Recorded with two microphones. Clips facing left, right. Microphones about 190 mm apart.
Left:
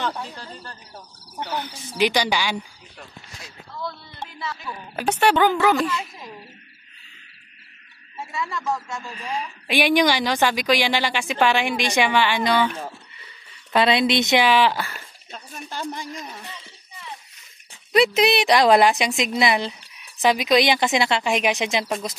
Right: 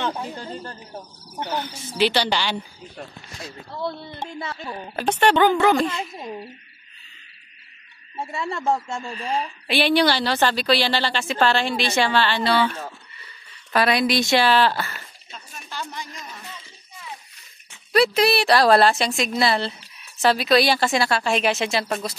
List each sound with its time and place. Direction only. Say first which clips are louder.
0.0 s speech: right 2 dB; 20° right (ahead or behind)
2.0 s speech: even; 15° left (ahead or behind)
4.4 s a woman's voice: left 2 dB; 50° right (ahead or behind)
4.9 s speech: right 1 dB; 10° left (ahead or behind)
8.2 s speech: right 2 dB; 30° right (ahead or behind)
9.7 s speech: even; 15° left (ahead or behind)
13.7 s speech: left 1 dB; 25° left (ahead or behind)
15.9 s a man's voice: left 4 dB; 50° left (ahead or behind)
17.9 s speech: even; 20° left (ahead or behind)